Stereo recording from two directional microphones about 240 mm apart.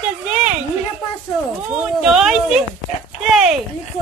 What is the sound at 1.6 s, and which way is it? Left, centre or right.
Speech, centre.